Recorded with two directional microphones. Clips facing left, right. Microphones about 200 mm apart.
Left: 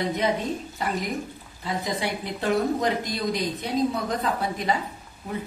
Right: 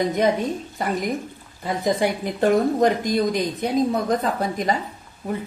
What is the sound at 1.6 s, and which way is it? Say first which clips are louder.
Speech: right 7 dB; 50° right (ahead or behind).